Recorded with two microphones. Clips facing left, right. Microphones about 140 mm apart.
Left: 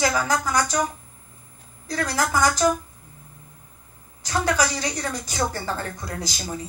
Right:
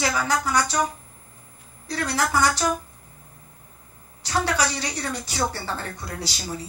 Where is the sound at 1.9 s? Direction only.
45° left (ahead or behind).